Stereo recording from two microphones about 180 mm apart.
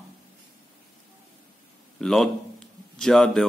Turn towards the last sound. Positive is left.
turn(degrees=5)  # may be behind; listen again after turning